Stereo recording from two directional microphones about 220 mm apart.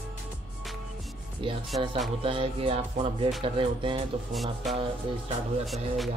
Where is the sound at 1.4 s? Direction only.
25° right (ahead or behind).